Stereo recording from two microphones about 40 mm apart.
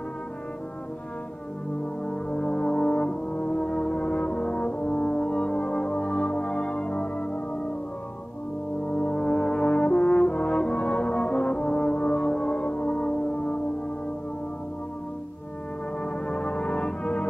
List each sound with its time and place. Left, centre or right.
2.0 s brass instrument: left
8.8 s brass instrument: left
12.5 s music: left
16.0 s brass instrument: left